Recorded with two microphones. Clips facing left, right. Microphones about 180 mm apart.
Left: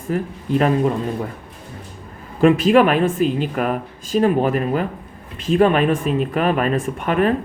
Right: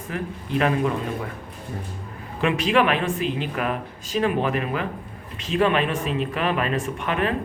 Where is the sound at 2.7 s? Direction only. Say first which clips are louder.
Left 6 dB; 45° left (ahead or behind).